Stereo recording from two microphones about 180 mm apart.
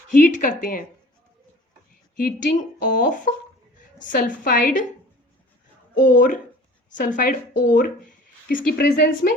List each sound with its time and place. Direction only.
0.1 s speech: 45° left (ahead or behind)
2.1 s a woman's voice: 50° left (ahead or behind)
6.0 s a woman's voice: 45° left (ahead or behind)